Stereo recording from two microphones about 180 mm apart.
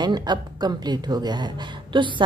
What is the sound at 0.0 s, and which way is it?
Speech, 25° right (ahead or behind).